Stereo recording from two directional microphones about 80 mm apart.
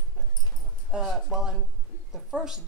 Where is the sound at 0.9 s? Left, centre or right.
Centre.